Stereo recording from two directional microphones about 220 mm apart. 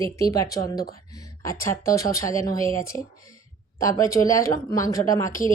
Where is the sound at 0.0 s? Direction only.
15° left (ahead or behind).